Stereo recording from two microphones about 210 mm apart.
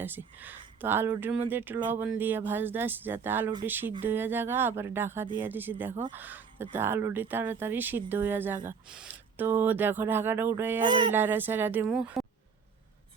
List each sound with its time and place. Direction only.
0.0 s speech: 10° right (ahead or behind)
10.8 s speech: 20° right (ahead or behind)
11.1 s speech: 10° right (ahead or behind)